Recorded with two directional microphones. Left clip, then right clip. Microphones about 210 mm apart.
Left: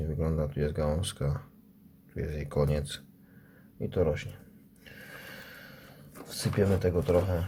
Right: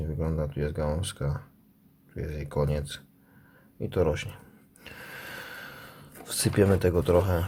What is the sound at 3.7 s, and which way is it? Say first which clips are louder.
Speech: right 2 dB; 15° right (ahead or behind).